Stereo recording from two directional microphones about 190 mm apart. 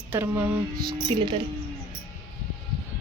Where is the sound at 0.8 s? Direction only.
25° right (ahead or behind).